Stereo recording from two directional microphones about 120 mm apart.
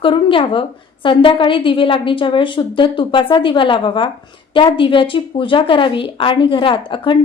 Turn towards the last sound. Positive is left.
turn(degrees=45)  # may be behind; listen again after turning